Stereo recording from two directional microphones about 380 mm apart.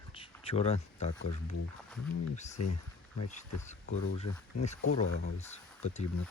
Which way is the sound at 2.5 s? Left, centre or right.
Left.